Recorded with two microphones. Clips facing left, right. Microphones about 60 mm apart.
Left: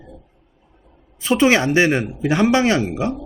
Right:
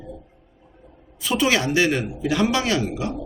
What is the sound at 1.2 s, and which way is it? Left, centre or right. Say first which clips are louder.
Speech: left 5 dB; left.